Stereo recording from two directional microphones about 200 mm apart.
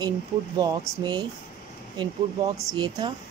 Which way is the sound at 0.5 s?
20° right (ahead or behind).